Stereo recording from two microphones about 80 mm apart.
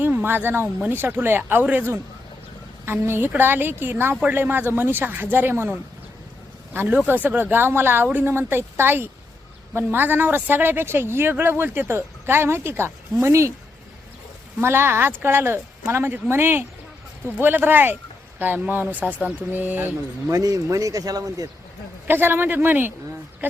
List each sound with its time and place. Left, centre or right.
0.0 s speech: right
6.7 s speech: centre; by 13.5 s right
14.6 s speech: right
20.3 s speech: right
22.0 s speech: right